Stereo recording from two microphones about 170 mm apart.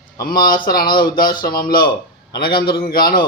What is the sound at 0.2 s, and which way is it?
Speech, 60° left (ahead or behind).